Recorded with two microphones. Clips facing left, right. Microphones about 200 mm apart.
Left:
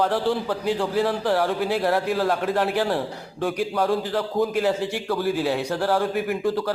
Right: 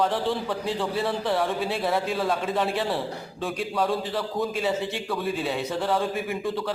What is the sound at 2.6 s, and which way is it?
Speech, 70° left (ahead or behind).